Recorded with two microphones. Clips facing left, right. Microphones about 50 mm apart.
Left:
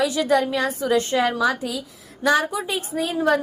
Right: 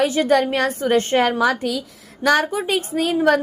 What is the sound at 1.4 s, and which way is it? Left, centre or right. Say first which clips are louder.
Speech: right 3 dB; right.